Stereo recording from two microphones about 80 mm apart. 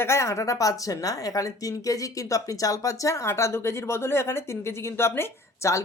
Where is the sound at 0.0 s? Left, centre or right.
Left.